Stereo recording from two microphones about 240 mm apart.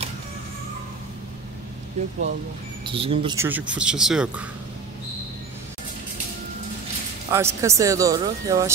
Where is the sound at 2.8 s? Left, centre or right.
Right.